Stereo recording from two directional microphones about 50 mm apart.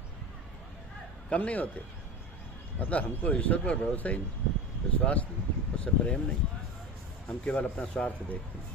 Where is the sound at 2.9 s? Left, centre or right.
Left.